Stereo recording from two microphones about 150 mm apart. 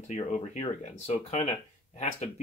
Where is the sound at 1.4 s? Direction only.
50° left (ahead or behind).